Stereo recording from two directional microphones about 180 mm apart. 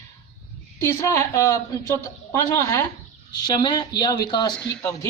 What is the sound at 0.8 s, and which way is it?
A woman's voice, 15° left (ahead or behind).